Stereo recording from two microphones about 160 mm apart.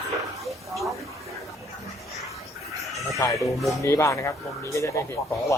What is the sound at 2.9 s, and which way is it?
Chicken, centre (ahead or behind).